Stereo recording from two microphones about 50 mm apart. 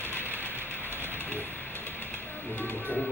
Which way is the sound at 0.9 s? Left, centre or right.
Left.